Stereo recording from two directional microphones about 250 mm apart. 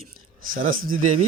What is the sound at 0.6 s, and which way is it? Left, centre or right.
Speech, right.